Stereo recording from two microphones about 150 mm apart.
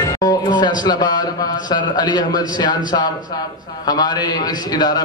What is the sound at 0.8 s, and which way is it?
A man's voice, 25° left (ahead or behind).